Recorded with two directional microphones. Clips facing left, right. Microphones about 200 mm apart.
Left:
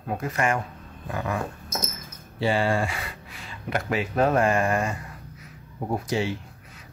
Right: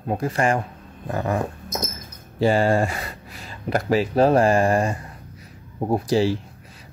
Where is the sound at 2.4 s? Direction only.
40° right (ahead or behind).